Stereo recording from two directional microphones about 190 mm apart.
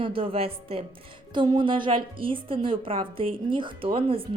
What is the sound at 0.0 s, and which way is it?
Speech, 30° right (ahead or behind).